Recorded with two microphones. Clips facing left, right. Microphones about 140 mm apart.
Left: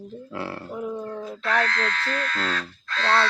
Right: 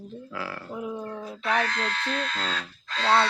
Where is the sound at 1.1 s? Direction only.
10° right (ahead or behind).